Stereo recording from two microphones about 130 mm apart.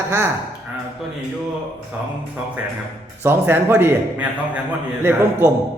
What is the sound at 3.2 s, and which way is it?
Speech, 15° right (ahead or behind).